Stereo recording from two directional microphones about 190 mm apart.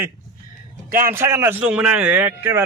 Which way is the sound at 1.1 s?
15° right (ahead or behind).